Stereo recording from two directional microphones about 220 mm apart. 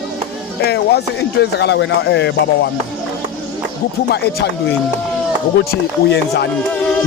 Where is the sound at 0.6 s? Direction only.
50° left (ahead or behind).